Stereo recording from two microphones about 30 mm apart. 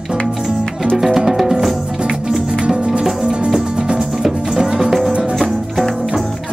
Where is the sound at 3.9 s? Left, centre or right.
Centre.